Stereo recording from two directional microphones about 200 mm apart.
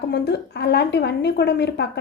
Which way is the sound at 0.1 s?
55° left (ahead or behind).